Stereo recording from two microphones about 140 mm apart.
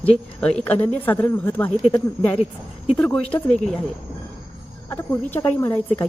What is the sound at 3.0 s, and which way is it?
Speech, 10° left (ahead or behind).